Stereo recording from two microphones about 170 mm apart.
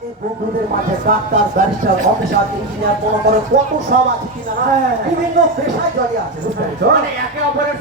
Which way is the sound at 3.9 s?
80° right.